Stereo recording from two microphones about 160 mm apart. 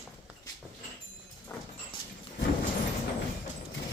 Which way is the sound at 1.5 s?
15° left (ahead or behind).